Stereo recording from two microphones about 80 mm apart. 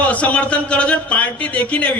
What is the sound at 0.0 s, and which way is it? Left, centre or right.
A man's voice, centre.